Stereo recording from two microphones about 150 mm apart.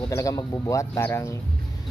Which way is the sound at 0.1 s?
20° left (ahead or behind).